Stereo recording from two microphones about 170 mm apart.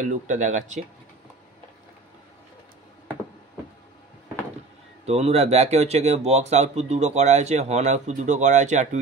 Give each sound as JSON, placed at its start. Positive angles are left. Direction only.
{"t": 0.0, "sound": "speech", "side_deg": -45}
{"t": 5.0, "sound": "speech", "side_deg": -35}